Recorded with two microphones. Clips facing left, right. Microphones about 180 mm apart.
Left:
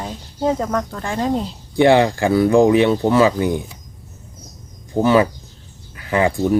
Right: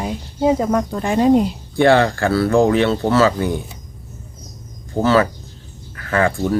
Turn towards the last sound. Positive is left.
turn(degrees=15)  # may be behind; listen again after turning